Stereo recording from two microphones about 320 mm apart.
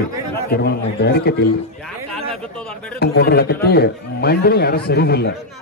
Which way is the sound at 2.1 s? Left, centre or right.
Centre.